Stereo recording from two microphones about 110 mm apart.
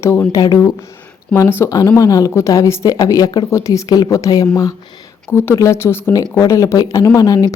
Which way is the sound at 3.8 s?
40° left (ahead or behind).